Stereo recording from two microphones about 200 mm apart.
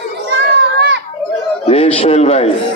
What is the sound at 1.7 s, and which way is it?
Speech, 30° left (ahead or behind).